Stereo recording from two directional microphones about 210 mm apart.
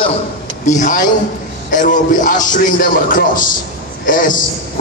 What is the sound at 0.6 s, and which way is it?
A man's voice, 35° left (ahead or behind).